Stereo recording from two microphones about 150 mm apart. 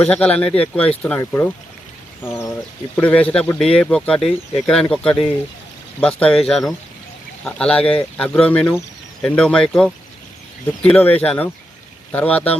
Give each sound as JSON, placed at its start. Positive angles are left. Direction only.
{"t": 0.0, "sound": "speech", "side_deg": 10}
{"t": 2.2, "sound": "a sound", "side_deg": 15}
{"t": 2.9, "sound": "speech", "side_deg": 10}